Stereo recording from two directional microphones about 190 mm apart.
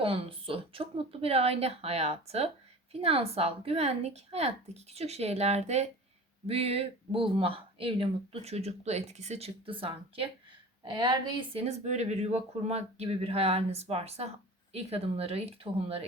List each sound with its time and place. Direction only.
0.0 s a woman's voice: 30° right (ahead or behind)